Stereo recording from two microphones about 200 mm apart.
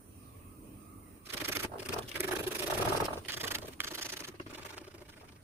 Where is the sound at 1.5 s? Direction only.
10° right (ahead or behind).